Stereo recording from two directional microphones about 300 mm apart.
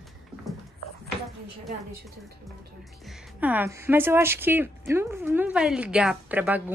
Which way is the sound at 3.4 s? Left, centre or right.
Centre.